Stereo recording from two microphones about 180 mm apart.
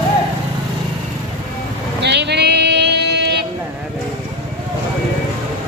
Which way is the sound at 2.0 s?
70° right (ahead or behind).